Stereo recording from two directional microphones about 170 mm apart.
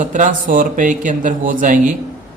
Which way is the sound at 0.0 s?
50° right (ahead or behind).